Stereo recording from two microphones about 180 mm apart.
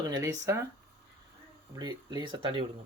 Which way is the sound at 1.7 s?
25° right (ahead or behind).